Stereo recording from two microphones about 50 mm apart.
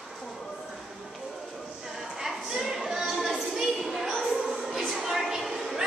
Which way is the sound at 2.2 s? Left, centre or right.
Centre.